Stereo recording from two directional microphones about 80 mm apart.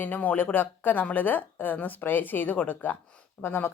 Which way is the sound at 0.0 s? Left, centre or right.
Left.